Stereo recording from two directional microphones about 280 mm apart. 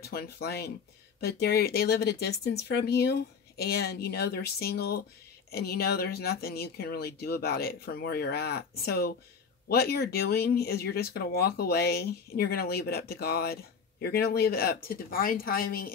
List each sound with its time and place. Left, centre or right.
0.0 s speech: left